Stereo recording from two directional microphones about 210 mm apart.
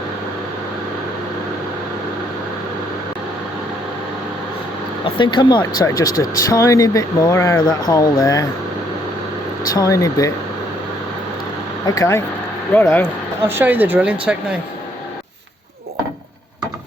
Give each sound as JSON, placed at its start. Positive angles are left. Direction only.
{"t": 5.0, "sound": "speech", "side_deg": 25}
{"t": 9.7, "sound": "speech", "side_deg": 15}
{"t": 11.9, "sound": "speech", "side_deg": 15}
{"t": 13.5, "sound": "speech", "side_deg": -10}